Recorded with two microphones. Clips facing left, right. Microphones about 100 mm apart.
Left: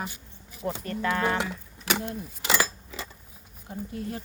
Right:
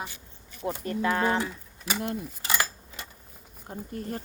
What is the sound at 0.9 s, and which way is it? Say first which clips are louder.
Speech: right 2 dB; 25° right (ahead or behind).